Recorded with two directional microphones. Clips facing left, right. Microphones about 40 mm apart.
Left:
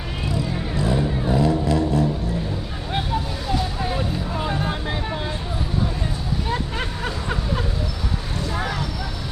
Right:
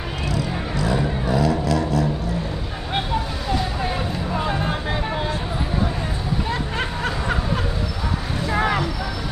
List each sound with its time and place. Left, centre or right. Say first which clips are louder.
0.3 s vehicle: even; left
4.4 s vehicle: right 2 dB; centre
8.5 s vehicle: right 7 dB; right